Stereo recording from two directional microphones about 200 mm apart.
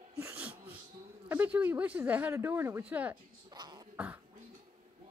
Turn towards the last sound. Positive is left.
turn(degrees=-5)  # may be behind; listen again after turning